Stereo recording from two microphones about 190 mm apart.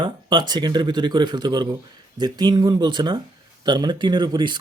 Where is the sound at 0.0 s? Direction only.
25° right (ahead or behind).